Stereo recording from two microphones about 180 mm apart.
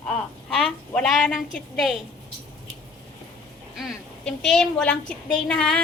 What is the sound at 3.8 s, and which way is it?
A woman's voice, centre (ahead or behind).